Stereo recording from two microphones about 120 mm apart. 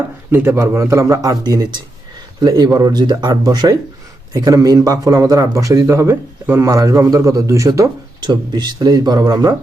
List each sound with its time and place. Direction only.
0.3 s speech: 20° right (ahead or behind)